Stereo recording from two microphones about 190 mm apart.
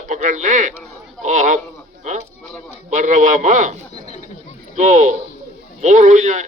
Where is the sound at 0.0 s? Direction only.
40° right (ahead or behind).